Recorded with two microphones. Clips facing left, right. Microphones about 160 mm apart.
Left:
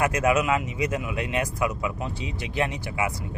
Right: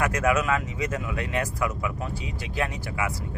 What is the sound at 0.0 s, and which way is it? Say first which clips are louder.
Speech: left 2 dB; 20° left (ahead or behind).